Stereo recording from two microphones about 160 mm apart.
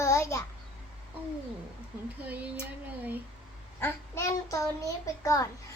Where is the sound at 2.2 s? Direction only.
10° right (ahead or behind).